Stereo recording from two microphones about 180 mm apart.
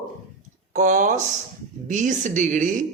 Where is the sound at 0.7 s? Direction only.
45° right (ahead or behind).